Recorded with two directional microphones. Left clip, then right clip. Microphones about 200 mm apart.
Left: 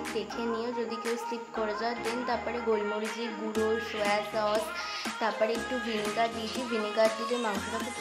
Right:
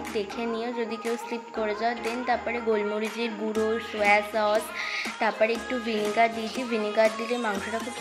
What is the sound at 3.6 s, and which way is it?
Speech, 10° right (ahead or behind).